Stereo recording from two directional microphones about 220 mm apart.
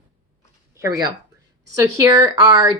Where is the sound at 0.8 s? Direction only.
15° right (ahead or behind).